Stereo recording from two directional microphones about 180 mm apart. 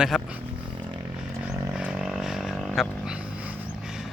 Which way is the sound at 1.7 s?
5° right (ahead or behind).